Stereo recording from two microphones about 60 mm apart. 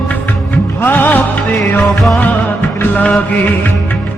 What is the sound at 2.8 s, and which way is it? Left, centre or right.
Music, left.